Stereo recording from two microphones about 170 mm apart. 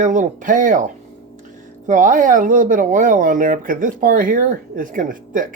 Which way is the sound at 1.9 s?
50° right (ahead or behind).